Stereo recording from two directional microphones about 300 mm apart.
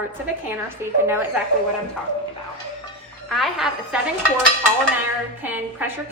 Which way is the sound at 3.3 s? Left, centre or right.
Centre.